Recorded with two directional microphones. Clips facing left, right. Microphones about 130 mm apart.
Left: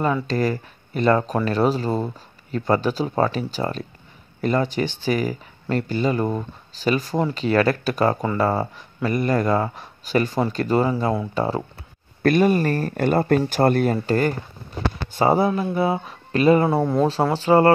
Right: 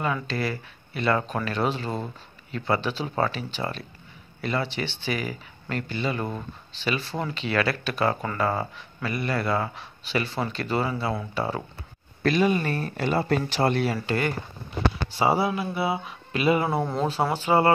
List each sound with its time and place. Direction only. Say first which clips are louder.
0.0 s speech: left 6 dB; 40° left (ahead or behind)
12.2 s speech: left 5 dB; 50° left (ahead or behind)